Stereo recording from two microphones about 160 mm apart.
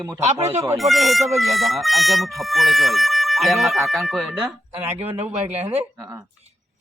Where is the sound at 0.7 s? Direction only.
Centre (ahead or behind).